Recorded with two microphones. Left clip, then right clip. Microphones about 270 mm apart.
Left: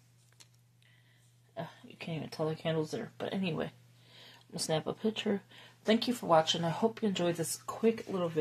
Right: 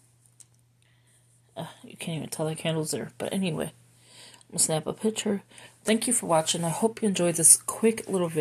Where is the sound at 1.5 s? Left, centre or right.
Right.